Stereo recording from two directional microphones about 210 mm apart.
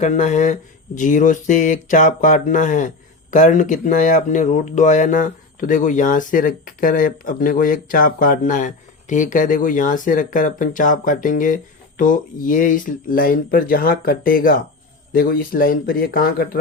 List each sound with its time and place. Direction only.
0.0 s speech: 35° left (ahead or behind)